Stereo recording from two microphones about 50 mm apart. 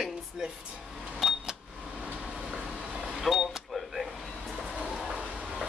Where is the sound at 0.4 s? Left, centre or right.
Centre.